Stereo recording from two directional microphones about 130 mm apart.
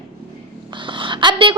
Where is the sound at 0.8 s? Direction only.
40° right (ahead or behind).